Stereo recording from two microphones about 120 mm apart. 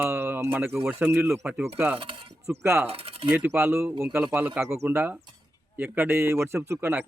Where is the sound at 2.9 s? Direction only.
55° right (ahead or behind).